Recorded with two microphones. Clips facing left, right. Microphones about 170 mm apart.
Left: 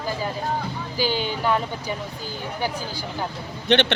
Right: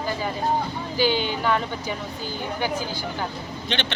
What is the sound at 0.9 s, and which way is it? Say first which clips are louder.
Speech: right 3 dB; 40° left (ahead or behind).